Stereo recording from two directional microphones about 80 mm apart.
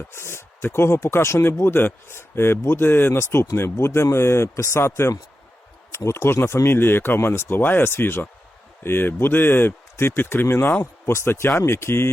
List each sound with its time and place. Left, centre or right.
0.1 s speech: left